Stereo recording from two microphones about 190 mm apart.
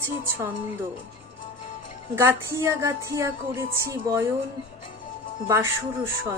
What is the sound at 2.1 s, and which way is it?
Music, 15° right (ahead or behind).